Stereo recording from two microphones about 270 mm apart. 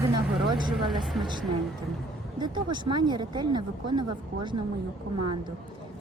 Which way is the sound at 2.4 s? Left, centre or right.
Centre.